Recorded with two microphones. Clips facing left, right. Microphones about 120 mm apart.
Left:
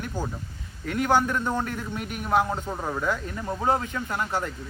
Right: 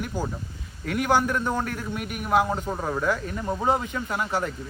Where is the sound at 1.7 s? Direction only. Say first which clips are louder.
Right 1 dB; 20° left (ahead or behind).